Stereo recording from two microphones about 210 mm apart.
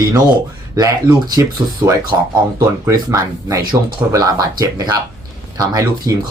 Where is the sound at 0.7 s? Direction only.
20° right (ahead or behind).